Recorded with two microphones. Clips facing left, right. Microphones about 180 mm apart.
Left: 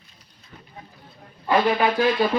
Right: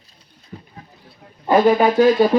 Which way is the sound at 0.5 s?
40° right (ahead or behind).